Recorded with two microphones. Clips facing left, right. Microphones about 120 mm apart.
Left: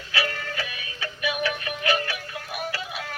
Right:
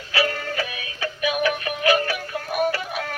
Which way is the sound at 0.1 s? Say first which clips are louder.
Right 5 dB; 45° right (ahead or behind).